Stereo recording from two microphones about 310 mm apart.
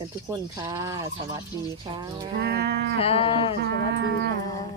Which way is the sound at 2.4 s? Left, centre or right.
Right.